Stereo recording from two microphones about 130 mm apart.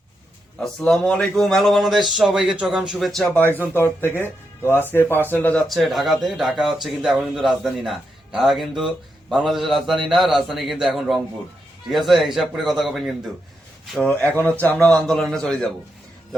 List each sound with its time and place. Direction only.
0.6 s speech: 5° left (ahead or behind)
3.4 s a man's voice: 15° left (ahead or behind)
5.6 s a man's voice: centre (ahead or behind)